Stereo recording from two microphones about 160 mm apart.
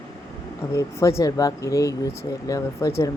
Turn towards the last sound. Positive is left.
turn(degrees=20)  # may be behind; listen again after turning